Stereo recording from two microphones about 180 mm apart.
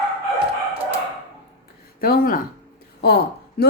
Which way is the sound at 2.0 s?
55° left (ahead or behind).